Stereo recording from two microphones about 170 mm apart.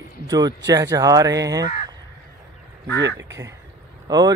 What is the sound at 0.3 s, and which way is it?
Speech, 25° right (ahead or behind).